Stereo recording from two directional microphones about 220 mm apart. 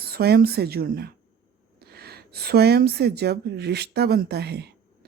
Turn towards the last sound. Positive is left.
turn(degrees=-50)  # may be behind; listen again after turning